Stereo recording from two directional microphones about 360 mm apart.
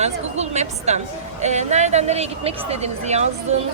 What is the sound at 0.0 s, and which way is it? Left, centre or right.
A woman's voice, centre.